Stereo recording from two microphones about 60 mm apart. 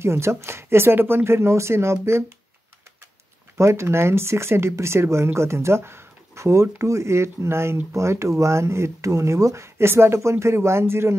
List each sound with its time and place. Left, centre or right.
0.0 s speech: right
3.5 s speech: right
9.8 s speech: right